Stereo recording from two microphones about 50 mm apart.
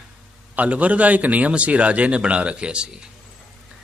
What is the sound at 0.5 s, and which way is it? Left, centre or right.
Speech, right.